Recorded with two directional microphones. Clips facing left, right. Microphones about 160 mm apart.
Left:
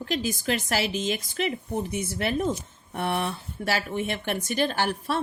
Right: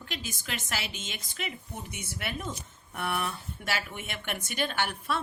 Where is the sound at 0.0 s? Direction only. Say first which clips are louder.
Left 12 dB; 35° left (ahead or behind).